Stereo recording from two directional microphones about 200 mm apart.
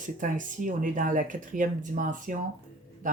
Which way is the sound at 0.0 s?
40° right (ahead or behind).